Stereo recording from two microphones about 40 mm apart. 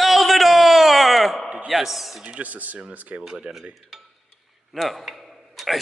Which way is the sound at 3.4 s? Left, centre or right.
Right.